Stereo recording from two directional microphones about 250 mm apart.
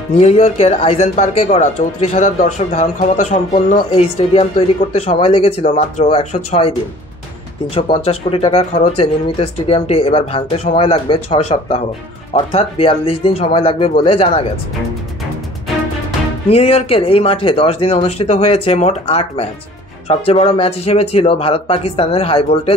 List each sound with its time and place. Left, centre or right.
0.2 s speech: left
7.7 s speech: left
16.4 s speech: left